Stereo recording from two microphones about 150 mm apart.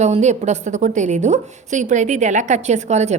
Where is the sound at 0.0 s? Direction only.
50° right (ahead or behind).